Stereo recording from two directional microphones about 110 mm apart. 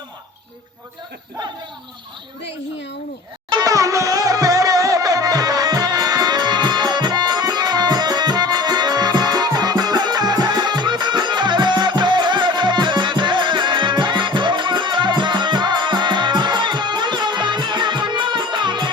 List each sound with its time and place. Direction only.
3.5 s music: 35° right (ahead or behind)